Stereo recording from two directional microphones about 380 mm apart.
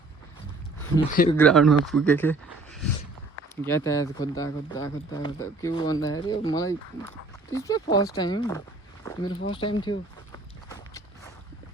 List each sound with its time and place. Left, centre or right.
1.1 s speech: left
1.4 s speech: centre
9.5 s walk: centre